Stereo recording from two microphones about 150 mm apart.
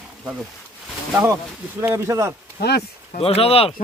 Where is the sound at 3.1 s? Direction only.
40° left (ahead or behind).